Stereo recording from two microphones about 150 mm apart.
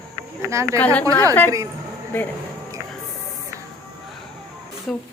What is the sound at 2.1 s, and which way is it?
Speech, 10° left (ahead or behind).